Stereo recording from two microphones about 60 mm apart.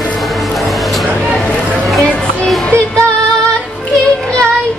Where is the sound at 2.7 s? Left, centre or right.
Centre.